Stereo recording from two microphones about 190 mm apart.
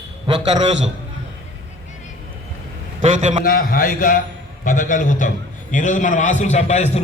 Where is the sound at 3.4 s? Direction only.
50° left (ahead or behind).